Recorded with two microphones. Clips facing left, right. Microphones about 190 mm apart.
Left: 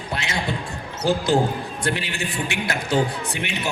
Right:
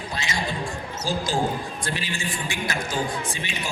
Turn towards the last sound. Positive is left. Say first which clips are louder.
# left 4 dB
turn(degrees=65)  # may be behind; listen again after turning